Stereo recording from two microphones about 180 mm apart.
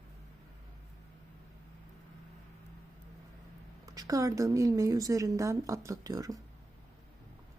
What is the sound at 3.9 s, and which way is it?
A woman's voice, 20° right (ahead or behind).